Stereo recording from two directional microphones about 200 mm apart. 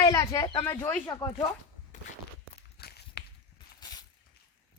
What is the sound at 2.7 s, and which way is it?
Walk, 55° left (ahead or behind).